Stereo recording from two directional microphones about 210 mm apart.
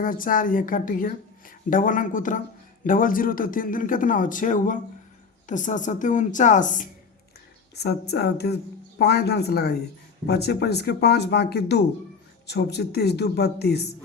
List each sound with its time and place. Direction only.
0.0 s a woman's voice: 40° left (ahead or behind)
7.8 s speech: 50° left (ahead or behind)